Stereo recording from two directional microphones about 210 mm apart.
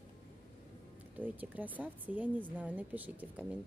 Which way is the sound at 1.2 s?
10° right (ahead or behind).